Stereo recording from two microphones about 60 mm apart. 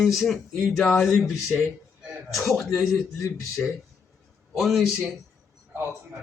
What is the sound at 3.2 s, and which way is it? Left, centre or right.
Speech, left.